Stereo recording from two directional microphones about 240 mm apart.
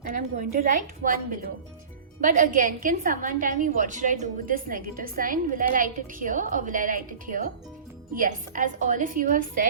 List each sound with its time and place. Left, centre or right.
0.1 s a woman's voice: right